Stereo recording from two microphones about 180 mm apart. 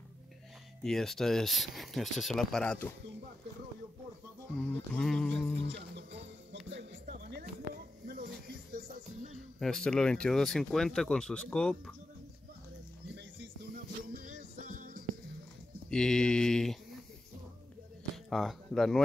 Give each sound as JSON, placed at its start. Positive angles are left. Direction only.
{"t": 0.8, "sound": "speech", "side_deg": 0}
{"t": 4.6, "sound": "speech", "side_deg": 5}
{"t": 5.6, "sound": "music", "side_deg": -80}
{"t": 6.7, "sound": "music", "side_deg": -65}
{"t": 9.3, "sound": "speech", "side_deg": 0}
{"t": 14.1, "sound": "music", "side_deg": -50}
{"t": 15.9, "sound": "speech", "side_deg": 5}
{"t": 18.1, "sound": "speech", "side_deg": 0}